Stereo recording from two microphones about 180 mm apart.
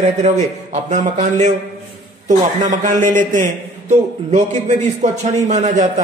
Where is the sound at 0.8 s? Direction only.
40° right (ahead or behind).